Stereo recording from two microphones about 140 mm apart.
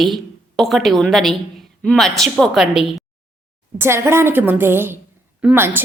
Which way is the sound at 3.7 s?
20° right (ahead or behind).